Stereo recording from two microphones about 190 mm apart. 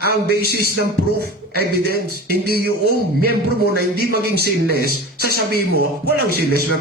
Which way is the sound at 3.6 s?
55° right (ahead or behind).